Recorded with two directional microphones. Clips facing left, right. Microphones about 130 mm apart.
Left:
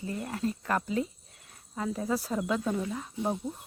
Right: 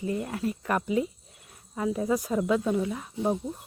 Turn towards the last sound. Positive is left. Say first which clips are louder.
# right 4 dB
turn(degrees=-5)  # may be behind; listen again after turning